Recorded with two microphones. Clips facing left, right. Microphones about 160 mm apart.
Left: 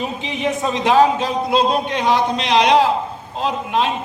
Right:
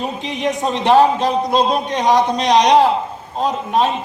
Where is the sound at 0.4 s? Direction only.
35° right (ahead or behind).